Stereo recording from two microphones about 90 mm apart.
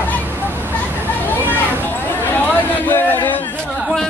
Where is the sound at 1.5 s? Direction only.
20° left (ahead or behind).